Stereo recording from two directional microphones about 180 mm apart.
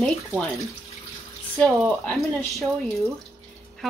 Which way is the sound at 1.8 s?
Centre (ahead or behind).